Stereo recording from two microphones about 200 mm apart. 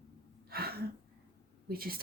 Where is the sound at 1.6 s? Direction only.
50° right (ahead or behind).